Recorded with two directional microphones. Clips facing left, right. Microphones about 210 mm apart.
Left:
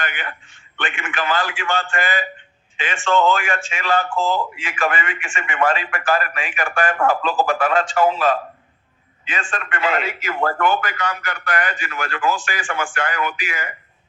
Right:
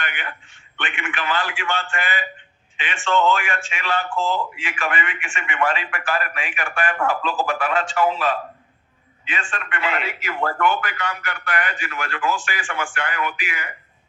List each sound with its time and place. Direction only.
0.8 s speech: 45° left (ahead or behind)
9.3 s speech: 45° left (ahead or behind)